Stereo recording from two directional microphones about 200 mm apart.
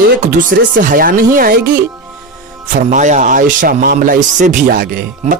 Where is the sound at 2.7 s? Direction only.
35° right (ahead or behind).